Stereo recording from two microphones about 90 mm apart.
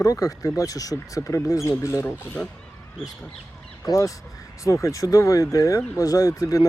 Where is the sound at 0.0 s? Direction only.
40° left (ahead or behind).